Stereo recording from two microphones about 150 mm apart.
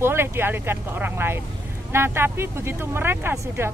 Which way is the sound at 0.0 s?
15° right (ahead or behind).